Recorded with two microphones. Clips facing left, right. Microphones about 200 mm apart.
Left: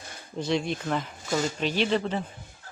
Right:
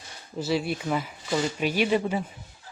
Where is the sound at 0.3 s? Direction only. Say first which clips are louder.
Right 1 dB; 5° right (ahead or behind).